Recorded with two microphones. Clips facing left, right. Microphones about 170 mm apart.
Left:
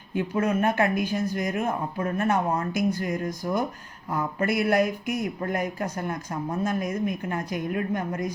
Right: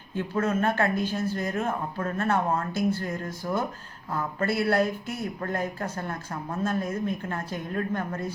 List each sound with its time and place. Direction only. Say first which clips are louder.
0.1 s speech: left 2 dB; 15° left (ahead or behind)